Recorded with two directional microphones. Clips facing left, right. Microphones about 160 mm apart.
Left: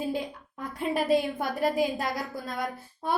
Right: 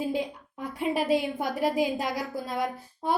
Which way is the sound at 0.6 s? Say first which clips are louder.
Right 1 dB; 10° right (ahead or behind).